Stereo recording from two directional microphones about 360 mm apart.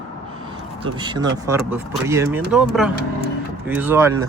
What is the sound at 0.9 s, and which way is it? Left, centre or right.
Speech, centre.